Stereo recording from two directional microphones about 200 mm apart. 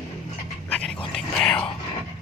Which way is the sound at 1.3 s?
5° left (ahead or behind).